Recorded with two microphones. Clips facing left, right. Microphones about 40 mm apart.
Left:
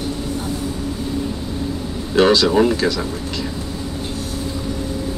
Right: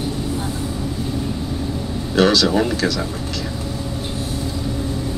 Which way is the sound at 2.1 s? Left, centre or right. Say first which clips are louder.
Left 2 dB; centre.